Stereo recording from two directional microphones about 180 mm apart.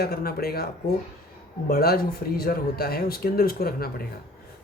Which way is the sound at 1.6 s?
60° left (ahead or behind).